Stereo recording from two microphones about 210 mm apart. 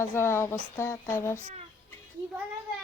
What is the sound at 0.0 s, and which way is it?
Speech, 10° left (ahead or behind).